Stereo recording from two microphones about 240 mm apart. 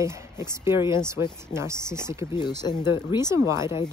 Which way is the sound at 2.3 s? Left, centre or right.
Centre.